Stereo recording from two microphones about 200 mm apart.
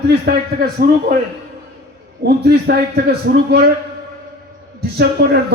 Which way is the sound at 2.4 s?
55° right (ahead or behind).